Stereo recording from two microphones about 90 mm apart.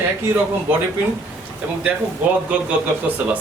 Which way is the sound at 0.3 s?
30° right (ahead or behind).